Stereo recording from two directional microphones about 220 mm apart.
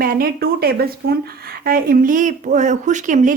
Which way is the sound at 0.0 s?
40° right (ahead or behind).